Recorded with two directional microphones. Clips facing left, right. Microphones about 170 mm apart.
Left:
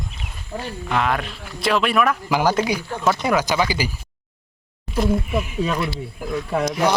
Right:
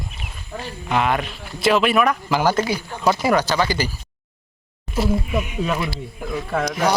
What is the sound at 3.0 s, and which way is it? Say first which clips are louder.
Speech: right 2 dB; 5° right (ahead or behind).